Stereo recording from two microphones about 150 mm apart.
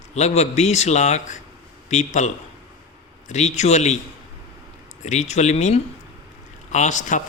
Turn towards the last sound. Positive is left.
turn(degrees=55)  # may be behind; listen again after turning